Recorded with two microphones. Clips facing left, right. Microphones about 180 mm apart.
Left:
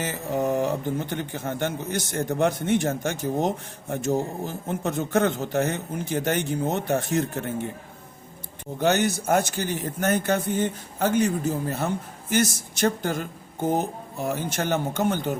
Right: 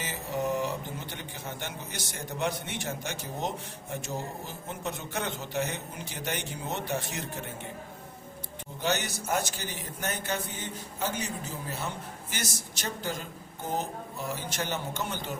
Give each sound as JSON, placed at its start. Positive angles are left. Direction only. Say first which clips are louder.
{"t": 0.0, "sound": "speech", "louder": "left 6 dB", "side_deg": 50}
{"t": 8.8, "sound": "speech", "louder": "left 9 dB", "side_deg": 50}